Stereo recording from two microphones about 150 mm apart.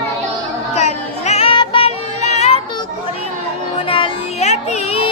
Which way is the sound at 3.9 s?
35° left (ahead or behind).